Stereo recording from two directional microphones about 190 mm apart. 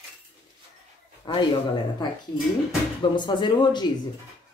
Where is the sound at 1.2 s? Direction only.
25° left (ahead or behind).